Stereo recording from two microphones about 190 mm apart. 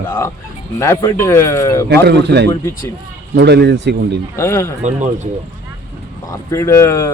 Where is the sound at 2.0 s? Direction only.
60° right (ahead or behind).